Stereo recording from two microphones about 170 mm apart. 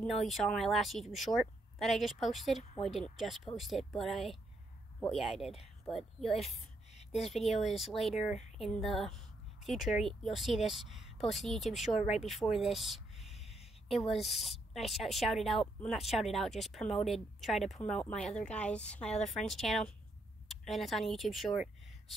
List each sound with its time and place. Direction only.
0.0 s speech: centre (ahead or behind)
6.9 s a sound: 40° left (ahead or behind)
7.2 s speech: centre (ahead or behind)